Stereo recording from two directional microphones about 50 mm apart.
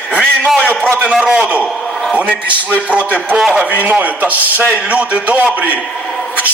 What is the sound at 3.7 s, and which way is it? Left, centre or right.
A man's voice, right.